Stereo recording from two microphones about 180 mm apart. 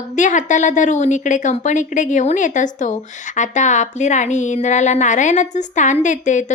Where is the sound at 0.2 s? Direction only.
45° left (ahead or behind).